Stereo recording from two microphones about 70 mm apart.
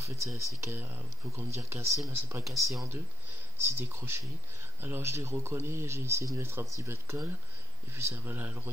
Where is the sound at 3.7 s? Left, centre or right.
Right.